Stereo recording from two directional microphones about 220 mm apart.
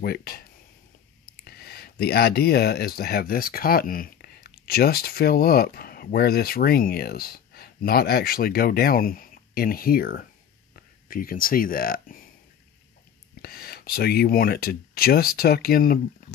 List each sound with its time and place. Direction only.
0.0 s a sound: 45° left (ahead or behind)
3.0 s speech: 45° left (ahead or behind)
13.4 s speech: 45° left (ahead or behind)